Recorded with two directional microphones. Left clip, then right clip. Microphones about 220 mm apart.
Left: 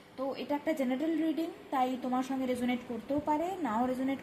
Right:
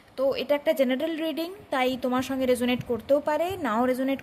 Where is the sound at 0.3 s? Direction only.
40° right (ahead or behind).